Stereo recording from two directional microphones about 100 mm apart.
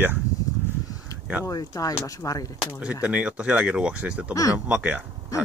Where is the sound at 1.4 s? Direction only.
35° left (ahead or behind).